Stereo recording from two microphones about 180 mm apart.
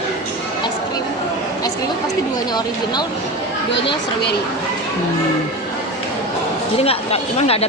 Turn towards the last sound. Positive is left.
turn(degrees=35)  # may be behind; listen again after turning